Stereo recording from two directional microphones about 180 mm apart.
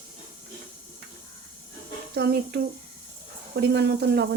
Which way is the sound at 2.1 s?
65° right (ahead or behind).